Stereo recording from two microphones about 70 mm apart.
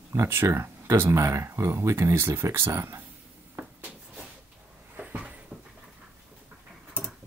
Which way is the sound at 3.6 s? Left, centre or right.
Right.